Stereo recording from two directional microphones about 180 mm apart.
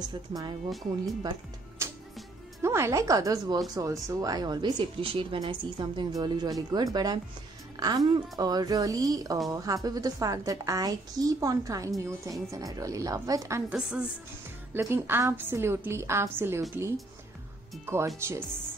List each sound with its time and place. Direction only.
0.3 s speech: 20° right (ahead or behind)
0.7 s speech: centre (ahead or behind)
1.8 s music: 15° right (ahead or behind)
2.6 s a woman's voice: 15° right (ahead or behind)